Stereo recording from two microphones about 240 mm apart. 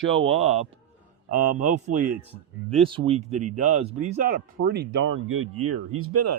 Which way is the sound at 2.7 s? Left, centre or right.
Right.